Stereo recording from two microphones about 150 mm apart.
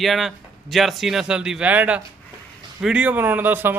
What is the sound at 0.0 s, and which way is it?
Speech, centre (ahead or behind).